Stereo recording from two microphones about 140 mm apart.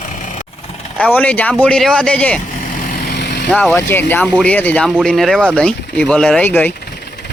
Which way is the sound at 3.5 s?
10° left (ahead or behind).